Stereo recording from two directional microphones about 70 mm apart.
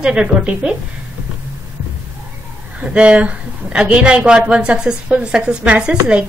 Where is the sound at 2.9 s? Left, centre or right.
Centre.